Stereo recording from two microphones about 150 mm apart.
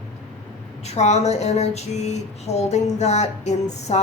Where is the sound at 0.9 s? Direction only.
45° left (ahead or behind).